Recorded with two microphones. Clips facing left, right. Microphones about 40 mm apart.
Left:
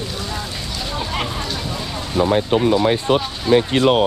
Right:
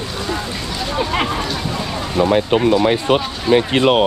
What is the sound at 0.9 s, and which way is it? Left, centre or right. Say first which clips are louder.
Speech: right 6 dB; right.